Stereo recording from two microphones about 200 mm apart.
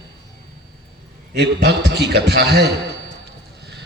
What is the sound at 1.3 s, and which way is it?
A man's voice, 55° right (ahead or behind).